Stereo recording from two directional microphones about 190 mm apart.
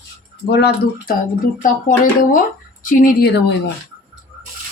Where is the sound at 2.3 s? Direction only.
45° left (ahead or behind).